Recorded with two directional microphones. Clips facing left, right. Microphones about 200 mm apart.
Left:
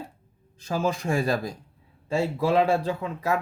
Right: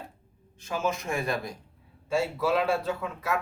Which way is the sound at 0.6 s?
35° left (ahead or behind).